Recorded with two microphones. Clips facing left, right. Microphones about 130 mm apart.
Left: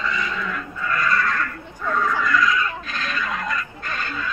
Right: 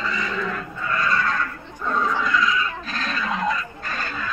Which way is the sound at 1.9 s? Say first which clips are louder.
Left 1 dB; 25° right (ahead or behind).